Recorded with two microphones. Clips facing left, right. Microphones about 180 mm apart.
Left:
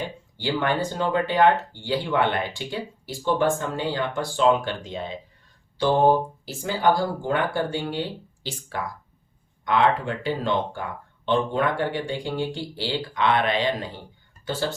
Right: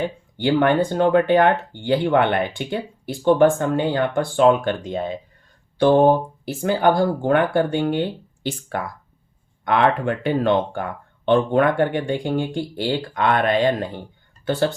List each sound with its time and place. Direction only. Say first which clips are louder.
0.3 s speech: right 7 dB; 55° right (ahead or behind)
14.4 s speech: right 7 dB; 60° right (ahead or behind)